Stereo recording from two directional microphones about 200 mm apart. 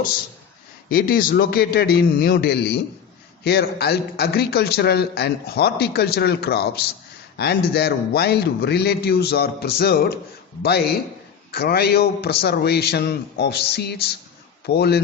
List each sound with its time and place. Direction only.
0.9 s a man's voice: 45° left (ahead or behind)